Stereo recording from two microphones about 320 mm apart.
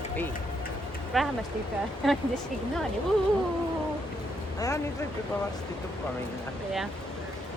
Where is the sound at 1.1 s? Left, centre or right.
Centre.